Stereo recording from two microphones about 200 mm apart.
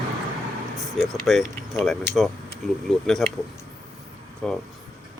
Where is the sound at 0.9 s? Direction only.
Centre (ahead or behind).